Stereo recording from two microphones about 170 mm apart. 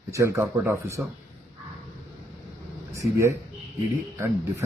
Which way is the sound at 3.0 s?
15° right (ahead or behind).